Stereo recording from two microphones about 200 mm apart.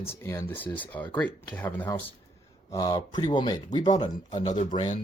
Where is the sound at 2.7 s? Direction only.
20° left (ahead or behind).